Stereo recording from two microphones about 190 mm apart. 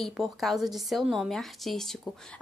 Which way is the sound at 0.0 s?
Centre (ahead or behind).